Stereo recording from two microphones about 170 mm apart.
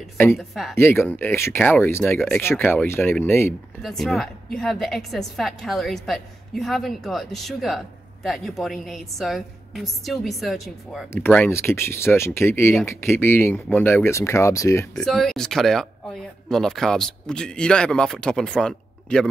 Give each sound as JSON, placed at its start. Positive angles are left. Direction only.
{"t": 0.4, "sound": "a woman's voice", "side_deg": 0}
{"t": 0.7, "sound": "speech", "side_deg": 15}
{"t": 3.8, "sound": "a woman's voice", "side_deg": 0}
{"t": 11.2, "sound": "speech", "side_deg": 10}
{"t": 15.0, "sound": "a woman's voice", "side_deg": 0}